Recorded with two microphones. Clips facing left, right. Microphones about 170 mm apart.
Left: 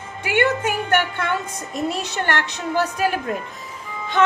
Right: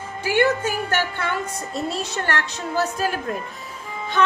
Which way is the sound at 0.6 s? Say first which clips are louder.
Left 3 dB; 60° left (ahead or behind).